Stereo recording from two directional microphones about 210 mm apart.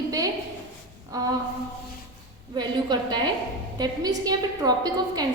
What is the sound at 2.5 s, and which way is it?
A woman's voice, 20° right (ahead or behind).